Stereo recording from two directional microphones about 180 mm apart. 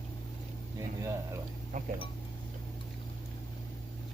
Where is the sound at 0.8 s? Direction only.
15° right (ahead or behind).